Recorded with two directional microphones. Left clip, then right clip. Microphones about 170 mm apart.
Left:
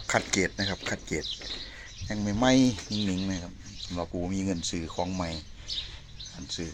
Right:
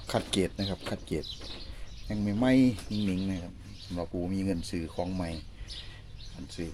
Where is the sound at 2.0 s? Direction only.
10° right (ahead or behind); by 5.3 s 5° left (ahead or behind).